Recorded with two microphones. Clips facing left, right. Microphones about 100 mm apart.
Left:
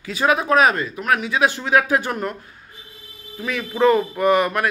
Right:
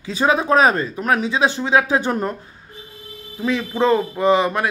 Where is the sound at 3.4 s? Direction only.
25° right (ahead or behind).